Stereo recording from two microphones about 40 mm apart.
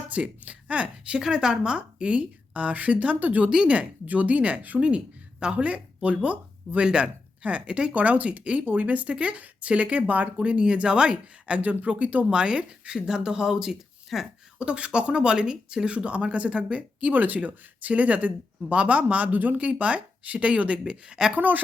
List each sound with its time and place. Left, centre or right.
0.1 s speech: right
1.2 s speech: centre
2.5 s speech: right
4.8 s speech: right
6.8 s speech: right
11.6 s speech: right
12.3 s speech: right; by 14.3 s centre
14.6 s speech: right
17.1 s speech: right
19.5 s speech: right
21.3 s a woman's voice: right